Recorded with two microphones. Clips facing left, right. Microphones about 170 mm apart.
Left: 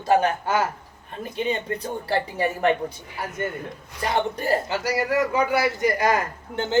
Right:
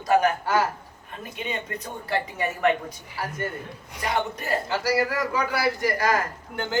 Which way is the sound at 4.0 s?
30° left (ahead or behind).